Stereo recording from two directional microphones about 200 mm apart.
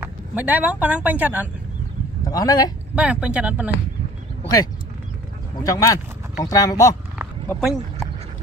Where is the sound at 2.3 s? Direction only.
20° left (ahead or behind).